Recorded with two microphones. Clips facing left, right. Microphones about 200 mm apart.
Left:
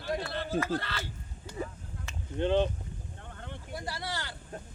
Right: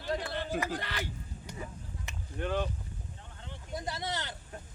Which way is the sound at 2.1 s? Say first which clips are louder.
Left 3 dB; 15° right (ahead or behind).